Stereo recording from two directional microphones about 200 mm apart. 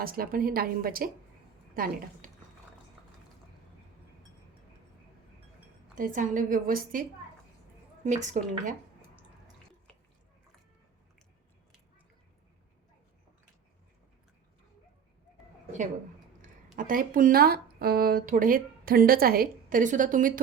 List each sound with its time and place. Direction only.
0.0 s speech: 45° right (ahead or behind)
6.0 s a woman's voice: 40° right (ahead or behind)
8.0 s a woman's voice: 35° right (ahead or behind)
16.7 s speech: 45° right (ahead or behind)